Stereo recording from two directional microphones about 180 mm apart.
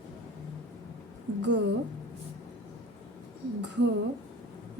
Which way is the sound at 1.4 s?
80° right.